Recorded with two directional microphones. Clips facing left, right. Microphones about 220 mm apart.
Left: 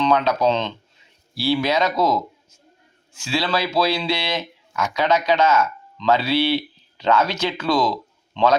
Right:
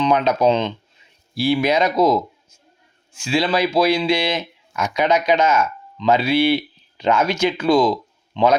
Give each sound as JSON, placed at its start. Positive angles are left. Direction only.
{"t": 0.0, "sound": "speech", "side_deg": -15}